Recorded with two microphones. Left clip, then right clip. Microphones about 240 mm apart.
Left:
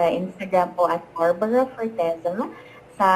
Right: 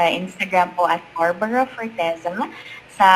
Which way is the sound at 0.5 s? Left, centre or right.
Centre.